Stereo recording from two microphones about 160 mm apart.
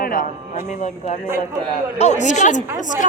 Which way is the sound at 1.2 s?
15° right (ahead or behind).